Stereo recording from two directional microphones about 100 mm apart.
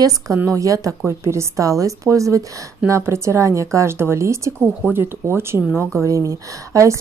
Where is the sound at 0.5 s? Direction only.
35° right (ahead or behind).